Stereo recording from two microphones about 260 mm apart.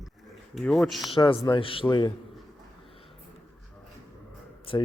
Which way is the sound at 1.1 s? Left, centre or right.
Centre.